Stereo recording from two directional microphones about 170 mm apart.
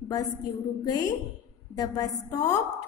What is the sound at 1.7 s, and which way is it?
A woman's voice, 20° left (ahead or behind).